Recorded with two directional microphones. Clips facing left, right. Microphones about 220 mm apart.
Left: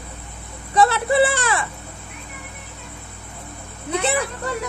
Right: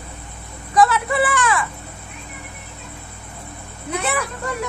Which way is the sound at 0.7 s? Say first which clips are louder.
Even; 30° left (ahead or behind).